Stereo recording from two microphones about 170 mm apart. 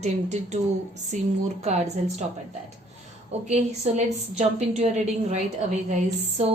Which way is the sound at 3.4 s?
40° right (ahead or behind).